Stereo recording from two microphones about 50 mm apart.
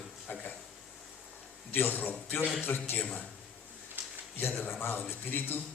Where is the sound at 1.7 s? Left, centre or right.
Left.